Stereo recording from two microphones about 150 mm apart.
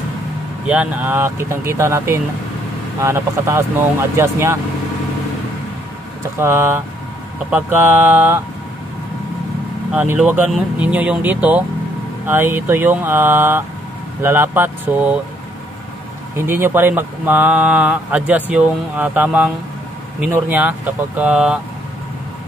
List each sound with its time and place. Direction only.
0.7 s speech: 10° right (ahead or behind)
6.3 s speech: 15° right (ahead or behind)
9.9 s speech: 10° right (ahead or behind)
16.3 s speech: 15° right (ahead or behind)